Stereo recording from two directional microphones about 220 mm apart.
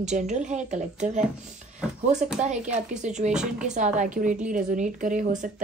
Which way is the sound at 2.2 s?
35° right (ahead or behind).